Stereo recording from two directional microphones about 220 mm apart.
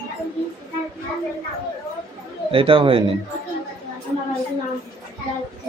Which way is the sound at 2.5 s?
25° right (ahead or behind).